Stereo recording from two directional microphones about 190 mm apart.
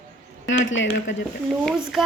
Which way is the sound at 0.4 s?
80° left.